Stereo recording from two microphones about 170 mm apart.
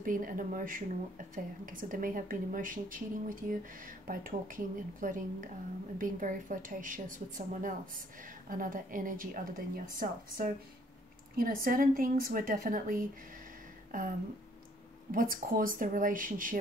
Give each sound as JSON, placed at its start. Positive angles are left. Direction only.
{"t": 0.0, "sound": "a woman's voice", "side_deg": -55}
{"t": 15.0, "sound": "speech", "side_deg": -55}